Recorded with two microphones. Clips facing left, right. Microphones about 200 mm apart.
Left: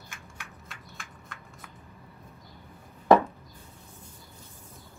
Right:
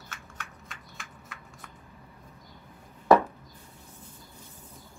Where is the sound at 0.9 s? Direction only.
5° right (ahead or behind).